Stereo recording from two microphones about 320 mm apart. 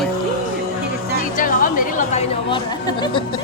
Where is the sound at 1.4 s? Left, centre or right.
Left.